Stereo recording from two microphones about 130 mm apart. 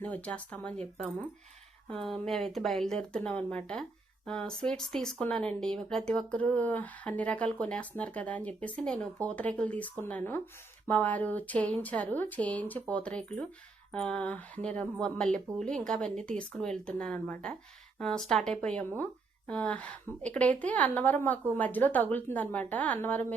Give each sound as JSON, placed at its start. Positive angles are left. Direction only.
{"t": 0.0, "sound": "speech", "side_deg": 10}